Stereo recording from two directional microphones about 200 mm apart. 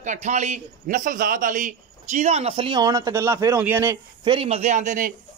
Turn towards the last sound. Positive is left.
turn(degrees=-40)  # may be behind; listen again after turning